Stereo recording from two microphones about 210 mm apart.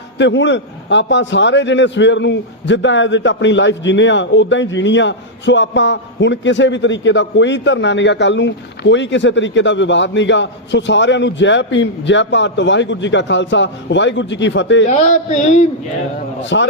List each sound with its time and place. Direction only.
0.2 s a man's voice: 60° left (ahead or behind)
14.8 s a sound: 35° left (ahead or behind)
16.4 s a man's voice: 60° left (ahead or behind)